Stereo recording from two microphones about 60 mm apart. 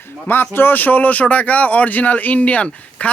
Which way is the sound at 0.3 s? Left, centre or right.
Left.